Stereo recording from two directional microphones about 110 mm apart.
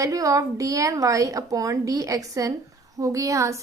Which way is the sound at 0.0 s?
30° right (ahead or behind).